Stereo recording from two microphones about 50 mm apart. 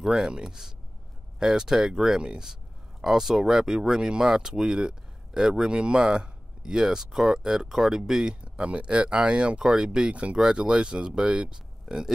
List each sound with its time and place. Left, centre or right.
0.0 s speech: centre